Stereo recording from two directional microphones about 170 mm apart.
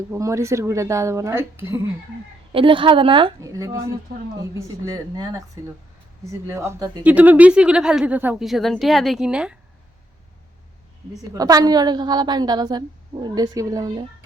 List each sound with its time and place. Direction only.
0.1 s speech: 15° right (ahead or behind)
2.5 s a woman's voice: 30° right (ahead or behind)
3.5 s a woman's voice: 20° right (ahead or behind)
6.5 s a woman's voice: 15° right (ahead or behind)
7.0 s a woman's voice: 10° right (ahead or behind)
11.1 s a woman's voice: 20° right (ahead or behind)